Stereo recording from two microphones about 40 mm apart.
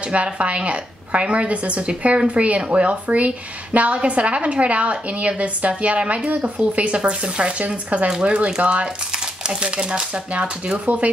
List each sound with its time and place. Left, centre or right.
0.0 s speech: right
8.1 s speech: right